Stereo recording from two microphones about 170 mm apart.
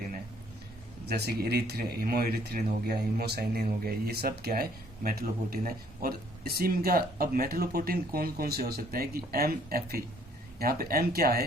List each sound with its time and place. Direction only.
1.0 s speech: 75° right (ahead or behind)